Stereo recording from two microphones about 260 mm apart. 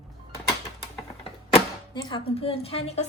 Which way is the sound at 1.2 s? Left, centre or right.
Centre.